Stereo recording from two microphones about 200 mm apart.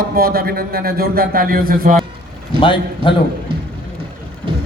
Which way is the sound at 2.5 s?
25° left (ahead or behind).